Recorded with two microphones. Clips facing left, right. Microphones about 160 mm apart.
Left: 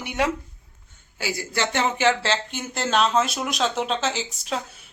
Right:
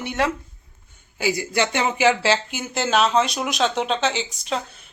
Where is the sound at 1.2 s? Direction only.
15° right (ahead or behind).